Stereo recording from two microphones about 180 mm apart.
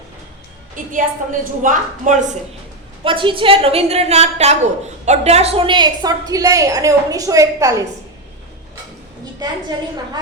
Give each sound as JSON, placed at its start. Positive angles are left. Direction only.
{"t": 0.9, "sound": "a woman's voice", "side_deg": -45}
{"t": 3.0, "sound": "a woman's voice", "side_deg": -30}